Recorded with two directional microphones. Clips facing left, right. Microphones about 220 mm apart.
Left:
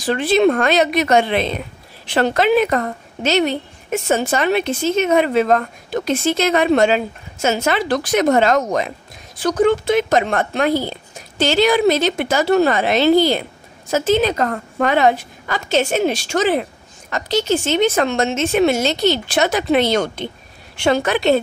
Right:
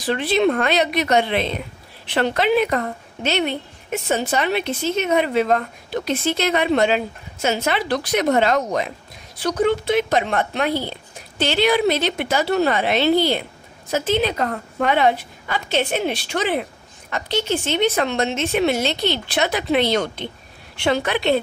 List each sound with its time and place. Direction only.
0.0 s speech: 45° left (ahead or behind)